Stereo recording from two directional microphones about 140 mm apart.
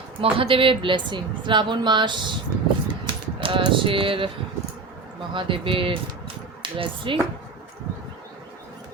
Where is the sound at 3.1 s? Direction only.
35° right (ahead or behind).